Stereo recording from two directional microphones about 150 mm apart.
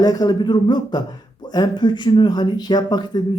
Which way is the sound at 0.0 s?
25° left (ahead or behind).